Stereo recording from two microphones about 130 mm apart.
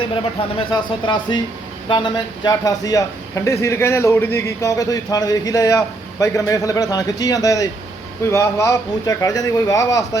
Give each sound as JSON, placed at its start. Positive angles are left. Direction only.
{"t": 0.7, "sound": "a man's voice", "side_deg": 35}